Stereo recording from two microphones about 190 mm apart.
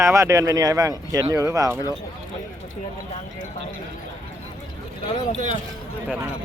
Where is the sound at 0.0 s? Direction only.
15° right (ahead or behind).